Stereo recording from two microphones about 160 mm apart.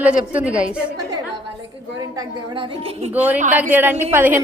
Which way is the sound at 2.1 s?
30° right (ahead or behind).